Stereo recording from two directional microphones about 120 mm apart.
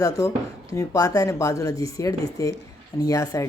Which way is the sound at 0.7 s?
25° left (ahead or behind).